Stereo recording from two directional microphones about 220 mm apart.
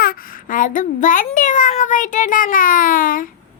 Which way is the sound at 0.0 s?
40° left (ahead or behind).